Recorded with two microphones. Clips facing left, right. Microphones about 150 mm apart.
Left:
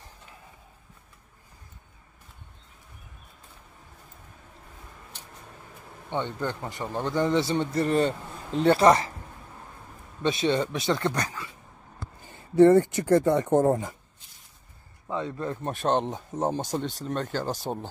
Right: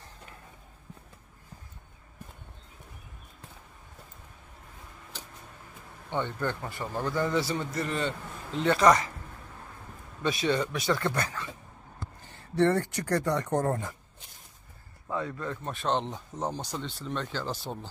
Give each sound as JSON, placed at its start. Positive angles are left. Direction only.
{"t": 6.0, "sound": "a man's voice", "side_deg": 15}
{"t": 10.2, "sound": "a man's voice", "side_deg": 25}
{"t": 15.0, "sound": "a man's voice", "side_deg": 20}
{"t": 15.6, "sound": "speech", "side_deg": 45}